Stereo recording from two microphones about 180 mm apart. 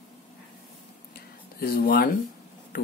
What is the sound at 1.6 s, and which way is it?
Speech, 55° left (ahead or behind).